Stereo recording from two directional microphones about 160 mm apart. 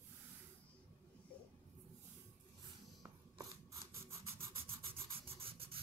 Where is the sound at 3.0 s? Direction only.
20° right (ahead or behind).